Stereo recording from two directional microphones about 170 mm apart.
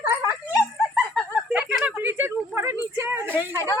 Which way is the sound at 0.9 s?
5° left (ahead or behind).